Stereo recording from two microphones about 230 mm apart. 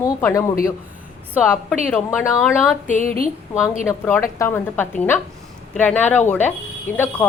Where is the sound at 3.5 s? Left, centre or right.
Centre.